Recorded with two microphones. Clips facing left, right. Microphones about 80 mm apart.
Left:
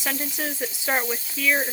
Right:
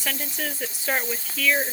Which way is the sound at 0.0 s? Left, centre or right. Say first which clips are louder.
Left 2 dB; left.